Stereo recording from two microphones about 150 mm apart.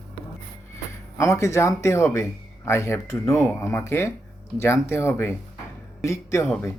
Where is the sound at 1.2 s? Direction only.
20° left (ahead or behind).